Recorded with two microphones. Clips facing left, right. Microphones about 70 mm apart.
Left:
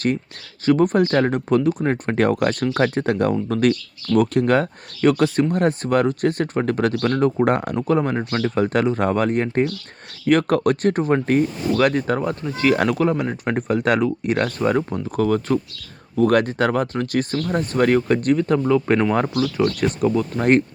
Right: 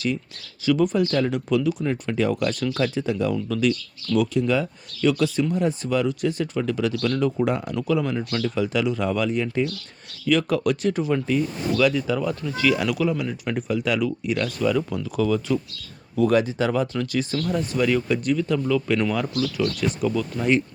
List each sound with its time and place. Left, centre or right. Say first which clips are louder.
0.6 s speech: left 4 dB; left
7.4 s speech: left 4 dB; left